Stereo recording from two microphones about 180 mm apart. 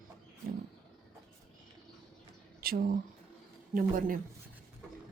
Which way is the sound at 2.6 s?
60° right (ahead or behind).